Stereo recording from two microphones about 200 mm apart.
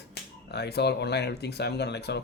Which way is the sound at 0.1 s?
55° left (ahead or behind).